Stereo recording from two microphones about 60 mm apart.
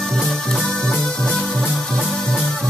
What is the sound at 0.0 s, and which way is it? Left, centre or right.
Music, centre.